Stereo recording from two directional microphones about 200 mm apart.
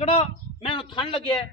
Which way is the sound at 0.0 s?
30° left (ahead or behind).